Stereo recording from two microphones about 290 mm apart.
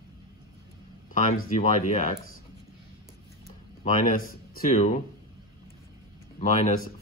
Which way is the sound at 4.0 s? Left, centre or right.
Left.